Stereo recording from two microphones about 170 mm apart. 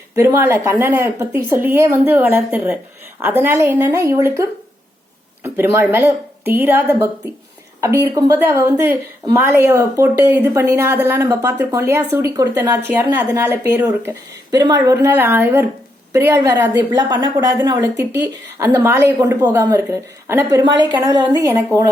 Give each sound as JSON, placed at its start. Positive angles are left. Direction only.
{"t": 0.2, "sound": "a woman's voice", "side_deg": -15}
{"t": 20.9, "sound": "a woman's voice", "side_deg": -25}